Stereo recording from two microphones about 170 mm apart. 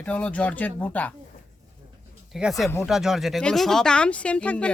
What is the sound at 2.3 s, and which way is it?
Speech, centre (ahead or behind).